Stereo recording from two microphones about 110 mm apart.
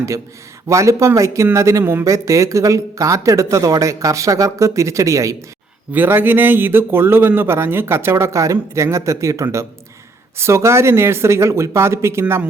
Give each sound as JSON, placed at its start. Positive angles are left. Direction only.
{"t": 0.7, "sound": "speech", "side_deg": -30}
{"t": 5.9, "sound": "speech", "side_deg": -20}